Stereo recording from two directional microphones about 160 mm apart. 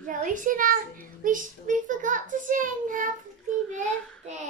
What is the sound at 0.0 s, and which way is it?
Speech, 55° right (ahead or behind).